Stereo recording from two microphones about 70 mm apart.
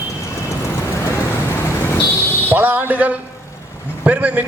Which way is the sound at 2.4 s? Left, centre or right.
Right.